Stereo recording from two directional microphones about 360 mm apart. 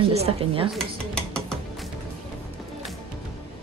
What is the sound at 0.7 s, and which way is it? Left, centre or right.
Dishes, centre.